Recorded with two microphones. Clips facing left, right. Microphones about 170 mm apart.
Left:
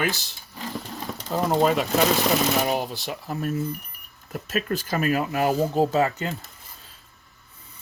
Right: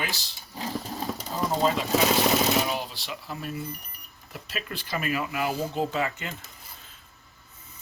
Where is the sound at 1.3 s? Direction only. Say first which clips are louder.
Left 5 dB; 60° left (ahead or behind).